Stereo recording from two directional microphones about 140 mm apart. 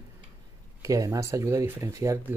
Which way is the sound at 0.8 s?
25° right (ahead or behind).